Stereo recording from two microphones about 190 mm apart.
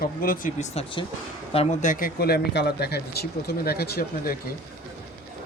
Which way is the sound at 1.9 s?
50° left (ahead or behind).